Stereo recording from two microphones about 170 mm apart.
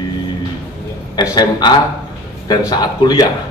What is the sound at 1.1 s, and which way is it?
A man's voice, 25° left (ahead or behind).